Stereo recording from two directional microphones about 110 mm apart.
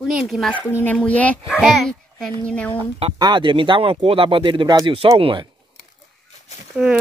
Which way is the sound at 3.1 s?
45° right (ahead or behind).